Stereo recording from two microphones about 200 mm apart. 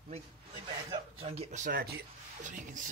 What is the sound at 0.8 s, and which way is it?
Speech, 30° right (ahead or behind).